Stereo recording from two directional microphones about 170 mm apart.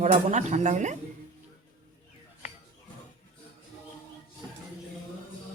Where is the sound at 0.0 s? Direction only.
45° right (ahead or behind).